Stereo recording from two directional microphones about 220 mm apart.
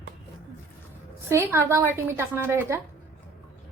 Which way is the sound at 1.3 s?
10° right (ahead or behind).